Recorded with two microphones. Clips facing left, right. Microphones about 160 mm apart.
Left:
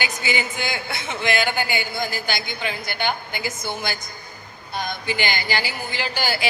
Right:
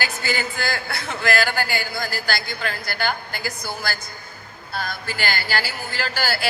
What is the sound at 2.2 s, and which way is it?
A man's voice, centre (ahead or behind).